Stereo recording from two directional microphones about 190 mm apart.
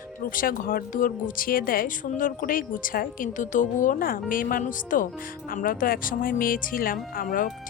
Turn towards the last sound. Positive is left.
turn(degrees=50)  # may be behind; listen again after turning